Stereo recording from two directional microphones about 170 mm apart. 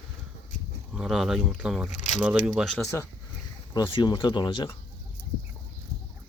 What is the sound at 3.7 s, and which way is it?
Speech, 25° left (ahead or behind).